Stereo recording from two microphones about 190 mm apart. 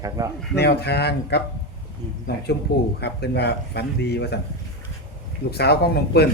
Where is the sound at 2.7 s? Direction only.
55° left (ahead or behind).